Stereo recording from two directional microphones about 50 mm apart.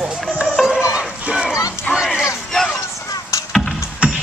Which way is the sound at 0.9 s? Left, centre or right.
Centre.